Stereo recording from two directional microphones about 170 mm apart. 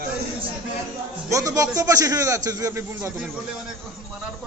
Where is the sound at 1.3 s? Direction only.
20° right (ahead or behind).